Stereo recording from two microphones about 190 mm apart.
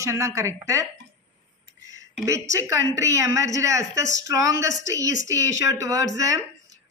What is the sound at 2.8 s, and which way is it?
Speech, 70° left (ahead or behind).